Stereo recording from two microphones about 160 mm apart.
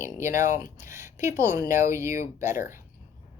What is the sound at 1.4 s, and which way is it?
Speech, 15° right (ahead or behind).